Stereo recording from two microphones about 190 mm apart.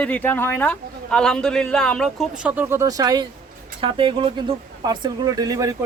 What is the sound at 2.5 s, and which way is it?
Speech, 10° right (ahead or behind).